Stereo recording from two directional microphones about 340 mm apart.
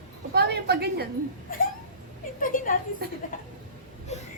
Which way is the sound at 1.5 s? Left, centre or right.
Left.